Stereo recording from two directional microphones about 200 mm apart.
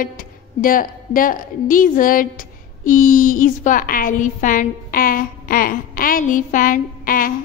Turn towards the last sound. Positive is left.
turn(degrees=45)  # may be behind; listen again after turning